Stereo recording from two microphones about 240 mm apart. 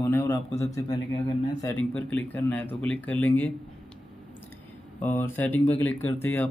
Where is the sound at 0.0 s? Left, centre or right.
Centre.